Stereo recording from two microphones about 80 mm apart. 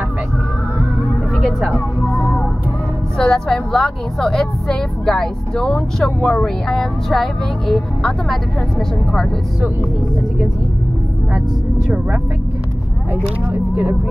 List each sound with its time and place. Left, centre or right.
2.0 s music: centre
3.2 s a woman's voice: centre
13.1 s speech: centre